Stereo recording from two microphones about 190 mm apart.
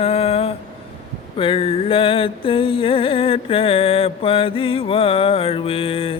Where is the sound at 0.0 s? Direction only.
30° left (ahead or behind).